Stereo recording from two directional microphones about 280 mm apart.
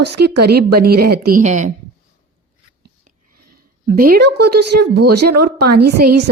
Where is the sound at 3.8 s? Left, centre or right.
Right.